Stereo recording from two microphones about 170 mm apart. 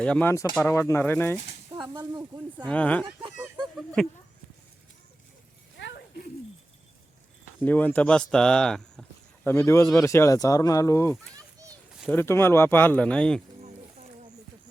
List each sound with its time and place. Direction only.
0.0 s speech: 10° left (ahead or behind)
1.7 s a sound: 30° right (ahead or behind)
2.3 s speech: 25° right (ahead or behind)
2.6 s speech: 10° left (ahead or behind)
5.7 s a sound: 90° left
7.6 s speech: 10° left (ahead or behind)